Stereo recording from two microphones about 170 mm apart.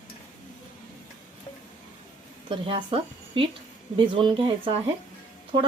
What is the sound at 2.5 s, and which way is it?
A woman's voice, 30° right (ahead or behind).